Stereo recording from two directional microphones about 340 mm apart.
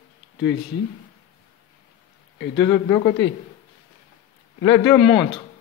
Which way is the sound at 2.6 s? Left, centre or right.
Centre.